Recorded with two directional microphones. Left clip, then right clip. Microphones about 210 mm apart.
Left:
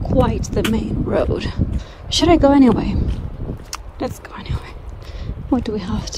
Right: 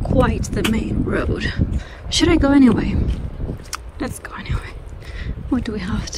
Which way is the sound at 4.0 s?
10° left (ahead or behind).